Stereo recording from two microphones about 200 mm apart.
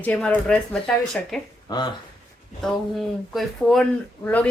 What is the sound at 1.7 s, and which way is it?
Speech, 20° left (ahead or behind).